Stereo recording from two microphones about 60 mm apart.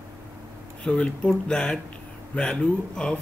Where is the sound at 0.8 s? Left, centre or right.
Centre.